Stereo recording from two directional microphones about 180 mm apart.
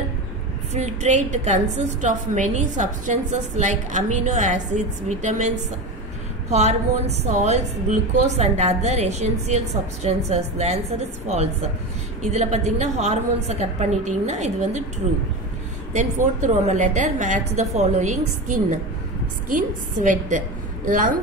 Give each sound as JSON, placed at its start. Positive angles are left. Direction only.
{"t": 0.7, "sound": "a woman's voice", "side_deg": -40}
{"t": 6.5, "sound": "a woman's voice", "side_deg": -35}
{"t": 12.3, "sound": "a woman's voice", "side_deg": -40}
{"t": 15.9, "sound": "a woman's voice", "side_deg": -40}